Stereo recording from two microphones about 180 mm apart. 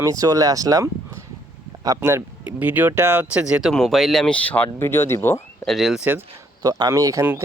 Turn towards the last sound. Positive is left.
turn(degrees=-15)  # may be behind; listen again after turning